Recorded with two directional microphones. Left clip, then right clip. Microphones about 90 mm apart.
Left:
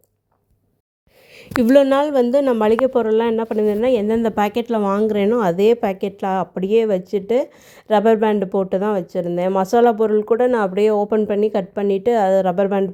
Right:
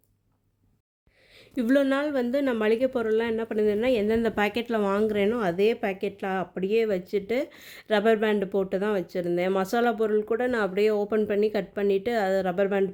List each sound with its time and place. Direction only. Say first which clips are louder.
1.6 s a woman's voice: left 10 dB; 60° left (ahead or behind)
1.9 s a woman's voice: left 10 dB; 40° left (ahead or behind)
2.2 s speech: left 9 dB; 20° left (ahead or behind)
5.0 s a woman's voice: left 7 dB; 35° left (ahead or behind)
5.4 s a woman's voice: left 9 dB; 50° left (ahead or behind); by 12.9 s 30° left (ahead or behind)